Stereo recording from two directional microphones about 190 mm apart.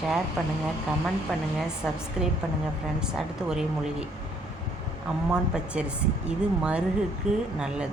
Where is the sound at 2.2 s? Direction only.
5° right (ahead or behind).